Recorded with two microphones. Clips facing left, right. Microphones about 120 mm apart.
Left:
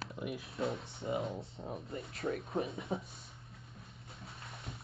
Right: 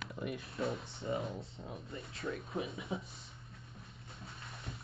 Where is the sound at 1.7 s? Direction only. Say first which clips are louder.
Left 4 dB; 25° left (ahead or behind).